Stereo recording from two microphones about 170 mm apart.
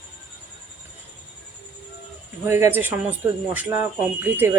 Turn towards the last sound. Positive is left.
turn(degrees=-15)  # may be behind; listen again after turning